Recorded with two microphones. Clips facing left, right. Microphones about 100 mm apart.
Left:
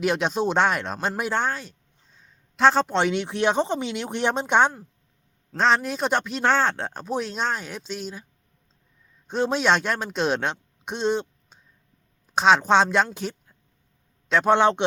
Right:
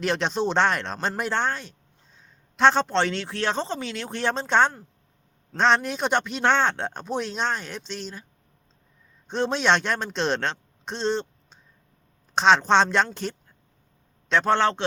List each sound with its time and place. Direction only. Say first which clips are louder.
0.0 s speech: left 2 dB; 10° left (ahead or behind)
5.5 s speech: even; centre (ahead or behind)
9.2 s a man's voice: left 1 dB; 5° left (ahead or behind)